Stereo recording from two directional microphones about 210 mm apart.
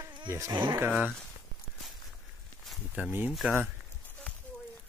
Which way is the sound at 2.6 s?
5° right (ahead or behind).